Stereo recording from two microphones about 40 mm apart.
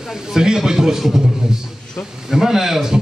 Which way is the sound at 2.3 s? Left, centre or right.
Centre.